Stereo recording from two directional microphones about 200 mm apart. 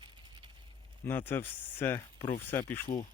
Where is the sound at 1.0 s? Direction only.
10° left (ahead or behind).